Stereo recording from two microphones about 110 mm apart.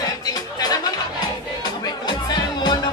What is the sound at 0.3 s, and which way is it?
Music, 35° left (ahead or behind).